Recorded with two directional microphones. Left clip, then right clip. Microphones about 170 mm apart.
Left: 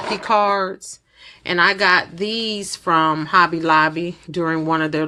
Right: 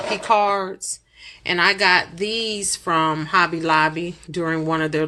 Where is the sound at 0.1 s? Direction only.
30° left (ahead or behind).